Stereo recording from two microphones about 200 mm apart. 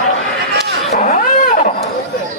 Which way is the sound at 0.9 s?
35° left (ahead or behind).